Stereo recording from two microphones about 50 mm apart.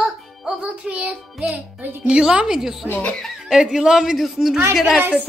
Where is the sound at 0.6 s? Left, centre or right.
Right; by 2.9 s centre.